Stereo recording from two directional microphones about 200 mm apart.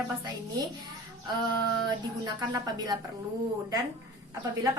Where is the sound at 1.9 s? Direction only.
20° right (ahead or behind).